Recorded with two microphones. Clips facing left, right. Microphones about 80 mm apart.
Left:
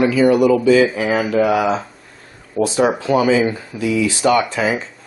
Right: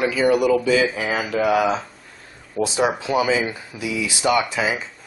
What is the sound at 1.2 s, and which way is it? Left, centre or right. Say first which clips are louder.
Speech: left 3 dB; centre.